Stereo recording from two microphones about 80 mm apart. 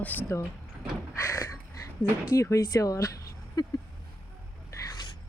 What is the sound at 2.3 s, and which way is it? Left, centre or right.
Speech, left.